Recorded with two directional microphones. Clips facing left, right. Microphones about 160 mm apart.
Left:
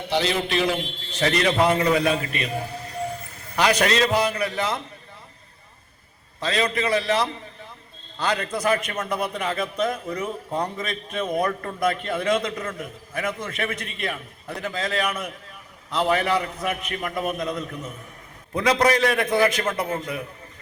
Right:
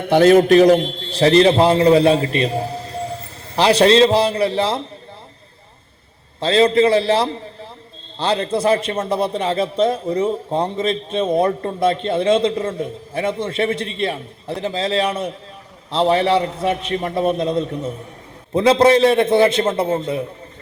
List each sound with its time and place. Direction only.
0.0 s a man's voice: 50° right (ahead or behind); by 4.8 s 30° right (ahead or behind)
6.4 s a man's voice: 30° right (ahead or behind)